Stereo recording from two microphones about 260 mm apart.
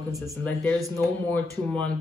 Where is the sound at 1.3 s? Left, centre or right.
Centre.